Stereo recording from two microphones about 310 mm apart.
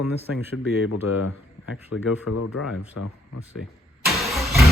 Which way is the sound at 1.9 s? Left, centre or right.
Left.